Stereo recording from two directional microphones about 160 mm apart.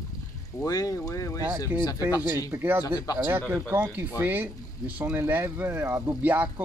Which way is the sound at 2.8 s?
25° left (ahead or behind).